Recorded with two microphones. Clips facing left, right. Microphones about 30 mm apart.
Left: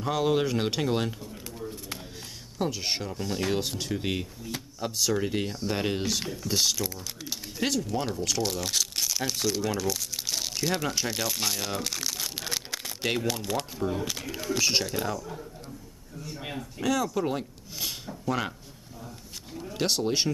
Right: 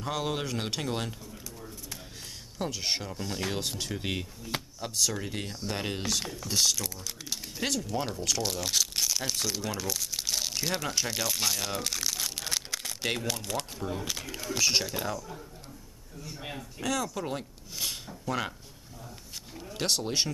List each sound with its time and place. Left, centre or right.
0.0 s speech: centre
2.6 s speech: centre
19.6 s speech: centre